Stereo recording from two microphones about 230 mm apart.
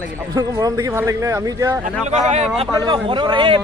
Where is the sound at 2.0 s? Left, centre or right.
Right.